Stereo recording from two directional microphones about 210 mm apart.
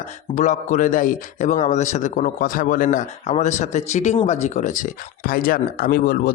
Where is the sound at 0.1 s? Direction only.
35° left (ahead or behind).